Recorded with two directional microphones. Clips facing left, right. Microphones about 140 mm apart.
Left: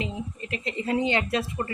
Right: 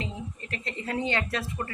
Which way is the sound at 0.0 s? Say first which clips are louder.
Left 4 dB; 15° left (ahead or behind).